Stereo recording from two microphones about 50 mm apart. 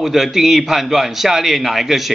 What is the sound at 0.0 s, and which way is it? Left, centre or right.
A man's voice, centre.